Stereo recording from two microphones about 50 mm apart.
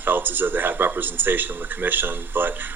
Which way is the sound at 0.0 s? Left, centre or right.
Right.